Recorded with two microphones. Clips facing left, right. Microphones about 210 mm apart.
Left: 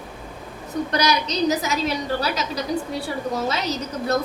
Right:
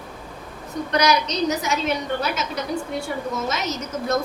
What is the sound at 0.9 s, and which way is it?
A woman's voice, 35° left (ahead or behind).